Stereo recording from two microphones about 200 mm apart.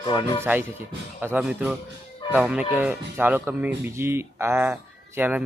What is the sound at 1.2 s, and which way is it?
Speech, 10° right (ahead or behind).